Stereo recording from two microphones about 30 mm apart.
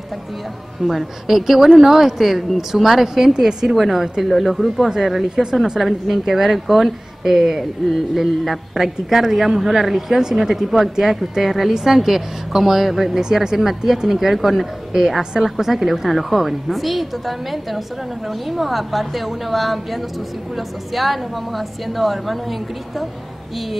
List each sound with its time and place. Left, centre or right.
0.9 s a woman's voice: centre
3.7 s a woman's voice: centre
5.3 s speech: right
5.8 s a woman's voice: centre